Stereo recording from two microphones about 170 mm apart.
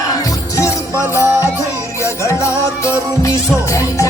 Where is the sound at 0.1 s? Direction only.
20° left (ahead or behind).